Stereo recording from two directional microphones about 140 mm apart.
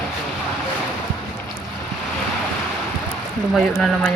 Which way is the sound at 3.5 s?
5° left (ahead or behind).